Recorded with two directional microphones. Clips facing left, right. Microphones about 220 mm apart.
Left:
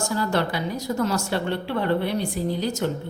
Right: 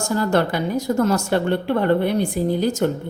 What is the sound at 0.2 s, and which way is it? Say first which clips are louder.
Speech: right 6 dB; 50° right (ahead or behind).